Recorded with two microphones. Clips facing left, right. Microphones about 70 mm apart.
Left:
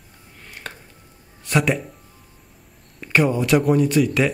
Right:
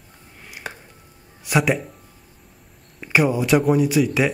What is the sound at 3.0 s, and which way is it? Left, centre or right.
Speech, centre.